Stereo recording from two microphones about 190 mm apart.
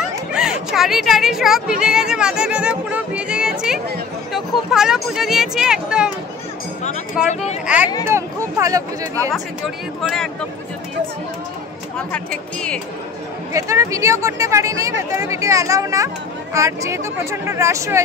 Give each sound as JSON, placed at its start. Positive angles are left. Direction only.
{"t": 0.0, "sound": "speech", "side_deg": -5}
{"t": 7.2, "sound": "speech", "side_deg": -5}
{"t": 10.0, "sound": "speech", "side_deg": 5}
{"t": 12.1, "sound": "speech", "side_deg": 5}
{"t": 13.5, "sound": "speech", "side_deg": -15}